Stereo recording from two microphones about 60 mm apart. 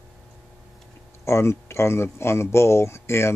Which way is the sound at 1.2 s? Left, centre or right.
Left.